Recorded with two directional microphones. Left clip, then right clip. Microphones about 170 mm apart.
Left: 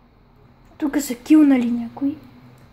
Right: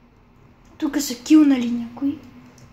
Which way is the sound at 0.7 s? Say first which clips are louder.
Left 1 dB; 45° left (ahead or behind).